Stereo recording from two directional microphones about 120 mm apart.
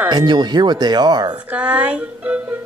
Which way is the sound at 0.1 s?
35° right (ahead or behind).